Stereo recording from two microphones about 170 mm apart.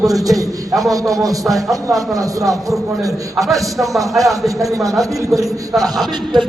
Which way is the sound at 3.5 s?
Centre (ahead or behind).